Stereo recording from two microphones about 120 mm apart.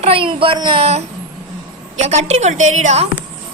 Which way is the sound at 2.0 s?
70° right (ahead or behind).